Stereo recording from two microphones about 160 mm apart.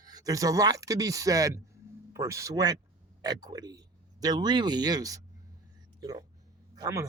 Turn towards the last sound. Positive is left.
turn(degrees=-20)  # may be behind; listen again after turning